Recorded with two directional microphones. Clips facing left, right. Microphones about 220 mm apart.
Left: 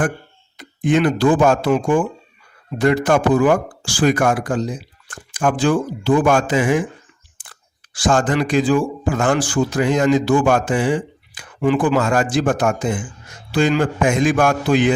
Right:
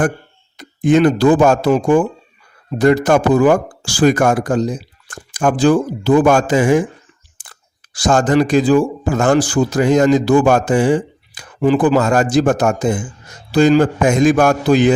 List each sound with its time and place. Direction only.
0.5 s speech: 40° right (ahead or behind)